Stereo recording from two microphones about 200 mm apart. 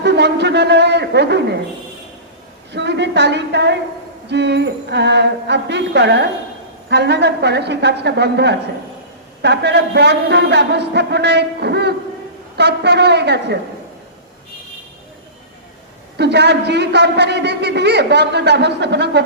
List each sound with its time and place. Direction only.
0.0 s a sound: 60° right (ahead or behind)
2.7 s a man's voice: 60° right (ahead or behind)
16.1 s a man's voice: 60° right (ahead or behind)